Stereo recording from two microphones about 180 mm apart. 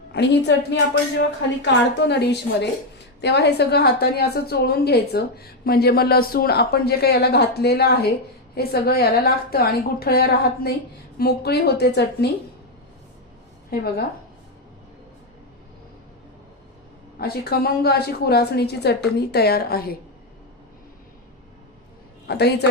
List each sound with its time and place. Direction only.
0.1 s a woman's voice: 70° left (ahead or behind)
13.7 s a woman's voice: 55° left (ahead or behind)
17.2 s a woman's voice: 60° left (ahead or behind)
22.3 s a woman's voice: 65° left (ahead or behind)